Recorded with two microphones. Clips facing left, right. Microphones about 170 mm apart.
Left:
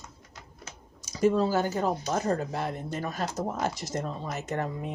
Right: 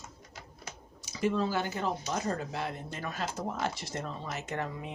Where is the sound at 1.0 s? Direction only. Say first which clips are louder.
Left 6 dB; 40° left (ahead or behind).